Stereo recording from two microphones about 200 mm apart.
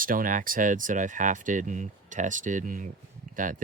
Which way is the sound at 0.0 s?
45° right (ahead or behind).